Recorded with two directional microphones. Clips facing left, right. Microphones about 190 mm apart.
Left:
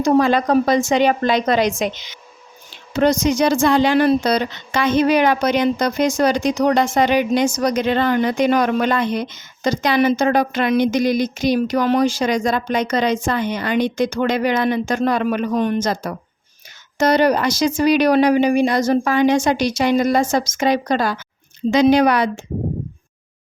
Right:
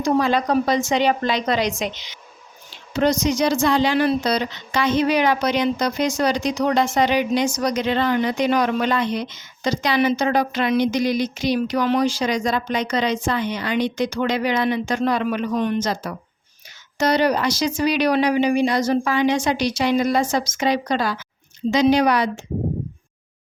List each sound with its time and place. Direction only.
0.0 s a woman's voice: 50° left (ahead or behind)